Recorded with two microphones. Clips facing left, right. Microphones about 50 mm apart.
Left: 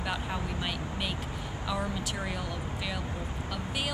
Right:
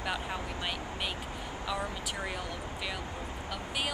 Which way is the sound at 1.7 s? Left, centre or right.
Centre.